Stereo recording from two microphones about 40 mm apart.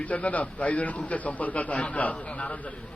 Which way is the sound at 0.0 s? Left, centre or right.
Left.